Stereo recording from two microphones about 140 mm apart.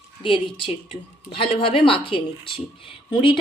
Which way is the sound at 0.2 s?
35° left (ahead or behind).